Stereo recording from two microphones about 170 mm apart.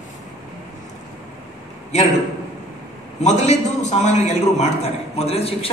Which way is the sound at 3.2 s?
40° left (ahead or behind).